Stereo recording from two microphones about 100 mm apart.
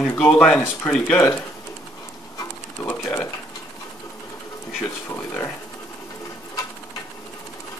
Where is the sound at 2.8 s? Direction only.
25° left (ahead or behind).